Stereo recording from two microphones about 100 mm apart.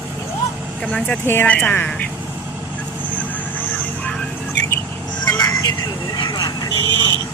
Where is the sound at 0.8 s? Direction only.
5° left (ahead or behind).